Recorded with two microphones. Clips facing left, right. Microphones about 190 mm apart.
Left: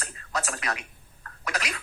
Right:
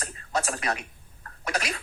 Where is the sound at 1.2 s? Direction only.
30° right (ahead or behind).